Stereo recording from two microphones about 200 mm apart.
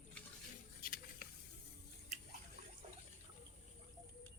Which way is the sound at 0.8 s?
45° left (ahead or behind).